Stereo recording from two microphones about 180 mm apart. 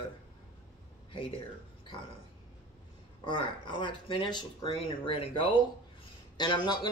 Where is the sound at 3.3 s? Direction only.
25° left (ahead or behind).